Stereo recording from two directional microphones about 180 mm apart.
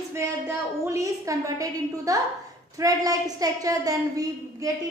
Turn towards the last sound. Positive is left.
turn(degrees=-20)  # may be behind; listen again after turning